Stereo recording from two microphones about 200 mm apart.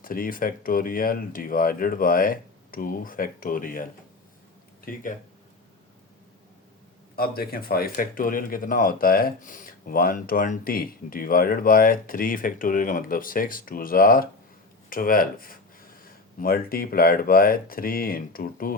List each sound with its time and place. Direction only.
0.0 s speech: 45° left (ahead or behind)
7.2 s speech: 50° left (ahead or behind)
14.8 s a sound: 45° left (ahead or behind)
16.4 s speech: 45° left (ahead or behind)